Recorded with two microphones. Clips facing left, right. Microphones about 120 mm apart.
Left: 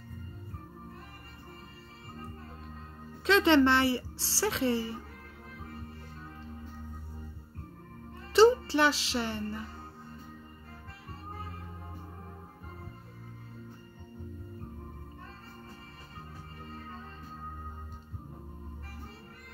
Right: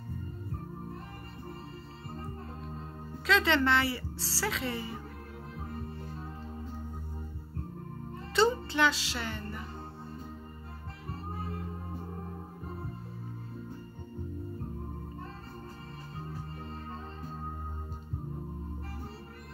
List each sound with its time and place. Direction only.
3.3 s a woman's voice: 25° left (ahead or behind)
8.3 s music: 30° left (ahead or behind)